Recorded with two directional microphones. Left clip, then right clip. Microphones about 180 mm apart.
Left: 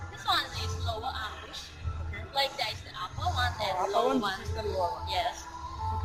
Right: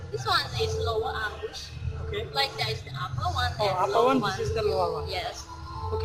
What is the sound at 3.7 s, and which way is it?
Speech, 30° right (ahead or behind).